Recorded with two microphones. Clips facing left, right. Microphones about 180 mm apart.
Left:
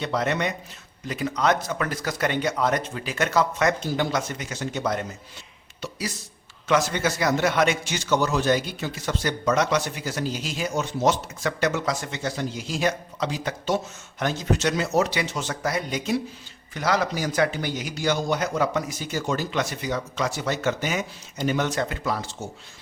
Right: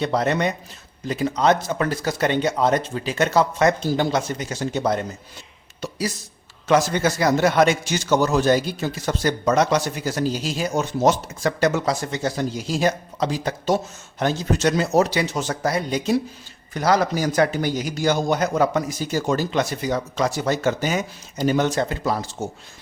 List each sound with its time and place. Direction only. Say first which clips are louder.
0.0 s a man's voice: right 4 dB; 35° right (ahead or behind)
5.8 s a sound: right 3 dB; 40° right (ahead or behind)
6.7 s a man's voice: right 4 dB; 35° right (ahead or behind)